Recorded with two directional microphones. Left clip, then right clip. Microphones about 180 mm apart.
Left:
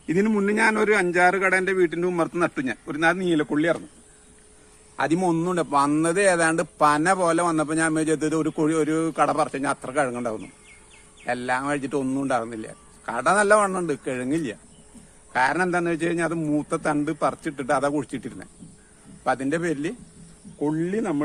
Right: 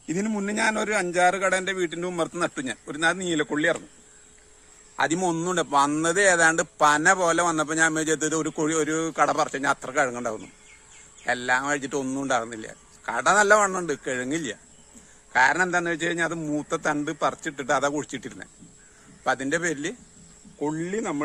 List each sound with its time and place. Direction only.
0.1 s a man's voice: 50° right (ahead or behind); by 3.8 s 20° right (ahead or behind)
4.9 s speech: 20° right (ahead or behind)